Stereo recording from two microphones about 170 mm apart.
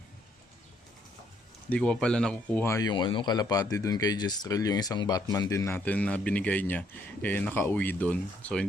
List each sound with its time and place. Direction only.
1.7 s speech: 5° left (ahead or behind)